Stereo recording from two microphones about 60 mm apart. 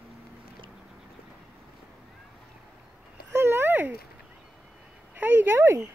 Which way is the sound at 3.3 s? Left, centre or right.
Right.